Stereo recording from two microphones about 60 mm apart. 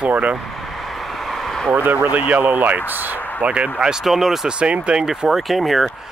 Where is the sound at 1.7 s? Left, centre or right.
Right.